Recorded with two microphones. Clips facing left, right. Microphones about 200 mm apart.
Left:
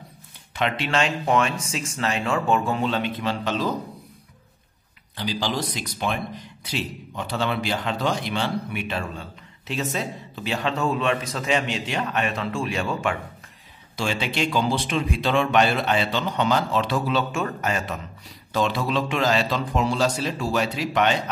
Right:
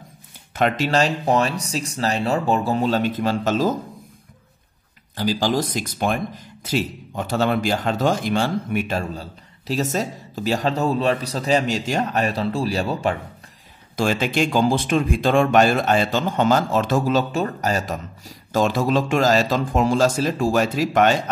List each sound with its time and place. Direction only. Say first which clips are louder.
0.6 s speech: right 5 dB; 45° right (ahead or behind)
5.1 s speech: right 6 dB; 45° right (ahead or behind)
13.9 s speech: right 5 dB; 45° right (ahead or behind)